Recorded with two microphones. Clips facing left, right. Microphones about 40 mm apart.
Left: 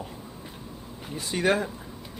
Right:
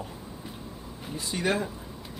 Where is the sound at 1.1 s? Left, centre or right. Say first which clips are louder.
Left 3 dB; left.